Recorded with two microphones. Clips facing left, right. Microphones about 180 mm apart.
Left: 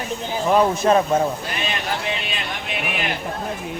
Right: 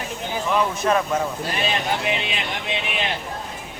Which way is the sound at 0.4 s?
35° left (ahead or behind).